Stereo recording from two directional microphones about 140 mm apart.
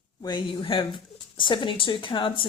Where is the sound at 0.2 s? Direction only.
30° left (ahead or behind).